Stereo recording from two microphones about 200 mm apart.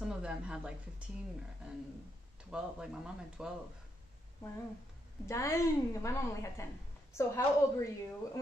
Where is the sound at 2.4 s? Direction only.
5° right (ahead or behind).